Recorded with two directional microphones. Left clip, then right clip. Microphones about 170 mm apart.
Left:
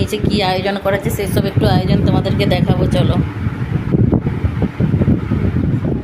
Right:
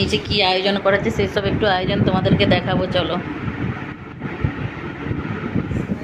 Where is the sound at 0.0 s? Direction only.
15° left (ahead or behind).